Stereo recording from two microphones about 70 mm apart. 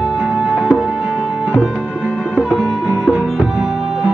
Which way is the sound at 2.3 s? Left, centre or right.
Centre.